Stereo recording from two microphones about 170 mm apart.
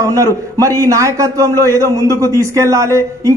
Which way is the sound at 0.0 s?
20° right (ahead or behind).